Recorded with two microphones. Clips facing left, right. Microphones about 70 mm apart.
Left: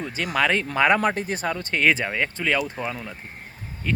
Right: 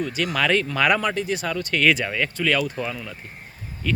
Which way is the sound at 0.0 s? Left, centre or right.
Left.